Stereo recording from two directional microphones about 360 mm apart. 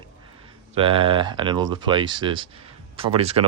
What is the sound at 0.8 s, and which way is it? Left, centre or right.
Speech, centre.